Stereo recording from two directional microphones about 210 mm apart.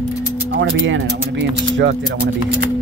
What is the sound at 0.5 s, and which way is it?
Speech, 60° right (ahead or behind).